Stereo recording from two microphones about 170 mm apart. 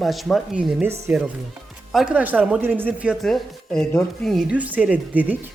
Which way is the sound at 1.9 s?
5° right (ahead or behind).